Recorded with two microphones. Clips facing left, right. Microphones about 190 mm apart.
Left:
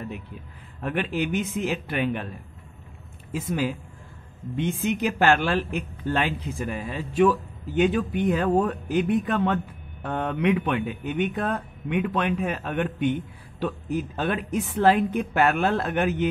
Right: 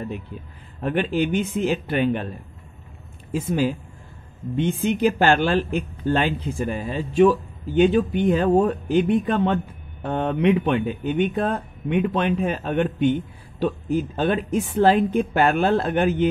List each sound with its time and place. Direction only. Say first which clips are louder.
0.7 s a man's voice: right 5 dB; 30° right (ahead or behind)
3.3 s speech: right 4 dB; 30° right (ahead or behind)